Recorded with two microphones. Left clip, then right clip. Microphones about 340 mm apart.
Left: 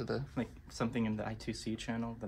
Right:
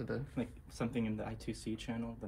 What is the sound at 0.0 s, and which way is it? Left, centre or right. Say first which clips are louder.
Speech: left 2 dB; left.